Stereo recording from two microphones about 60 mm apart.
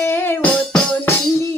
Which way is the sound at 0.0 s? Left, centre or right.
Left.